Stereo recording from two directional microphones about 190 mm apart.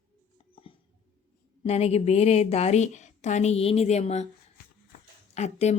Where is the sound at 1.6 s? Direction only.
35° left (ahead or behind).